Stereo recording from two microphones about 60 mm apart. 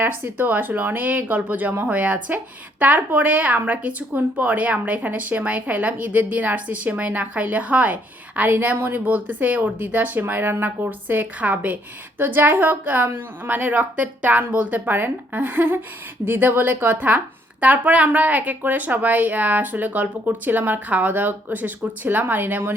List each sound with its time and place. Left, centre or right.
0.0 s a woman's voice: right